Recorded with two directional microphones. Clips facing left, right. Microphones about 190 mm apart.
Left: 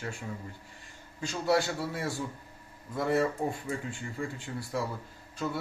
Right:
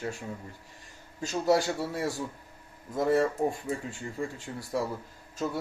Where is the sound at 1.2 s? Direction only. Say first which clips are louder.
Right 2 dB; 40° right (ahead or behind).